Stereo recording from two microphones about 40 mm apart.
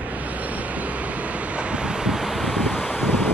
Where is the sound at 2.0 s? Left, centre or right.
Centre.